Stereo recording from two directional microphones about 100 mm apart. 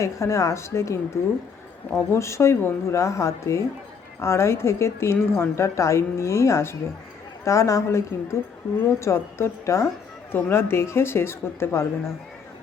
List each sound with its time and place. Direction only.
0.0 s a woman's voice: 30° left (ahead or behind)